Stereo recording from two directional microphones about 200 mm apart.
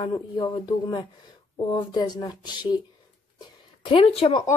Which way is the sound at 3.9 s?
30° left (ahead or behind).